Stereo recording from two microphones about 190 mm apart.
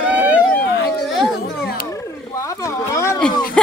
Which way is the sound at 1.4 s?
55° left (ahead or behind).